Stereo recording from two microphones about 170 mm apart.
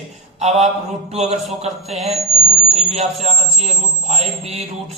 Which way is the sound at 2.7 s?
40° right (ahead or behind).